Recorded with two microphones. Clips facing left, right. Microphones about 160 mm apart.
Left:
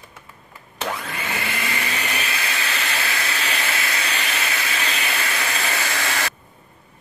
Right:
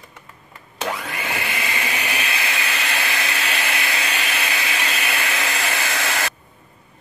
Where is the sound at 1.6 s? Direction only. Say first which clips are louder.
Right 1 dB; 20° right (ahead or behind).